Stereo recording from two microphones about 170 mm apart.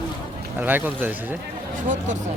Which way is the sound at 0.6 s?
10° right (ahead or behind).